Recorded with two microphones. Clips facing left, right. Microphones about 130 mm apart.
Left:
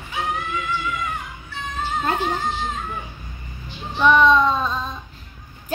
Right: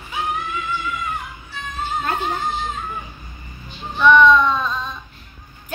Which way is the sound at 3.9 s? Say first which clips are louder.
Right 2 dB; 35° left (ahead or behind).